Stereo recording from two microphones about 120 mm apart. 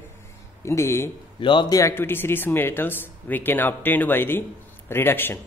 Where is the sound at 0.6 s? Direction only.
25° left (ahead or behind).